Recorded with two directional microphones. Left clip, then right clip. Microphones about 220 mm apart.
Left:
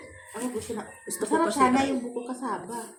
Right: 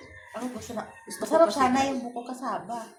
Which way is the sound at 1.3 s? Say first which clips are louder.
Right 2 dB; 25° right (ahead or behind).